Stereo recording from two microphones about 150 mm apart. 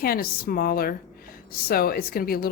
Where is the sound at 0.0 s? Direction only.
80° left.